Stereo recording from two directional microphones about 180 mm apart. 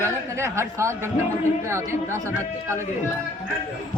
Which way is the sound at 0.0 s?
15° right (ahead or behind).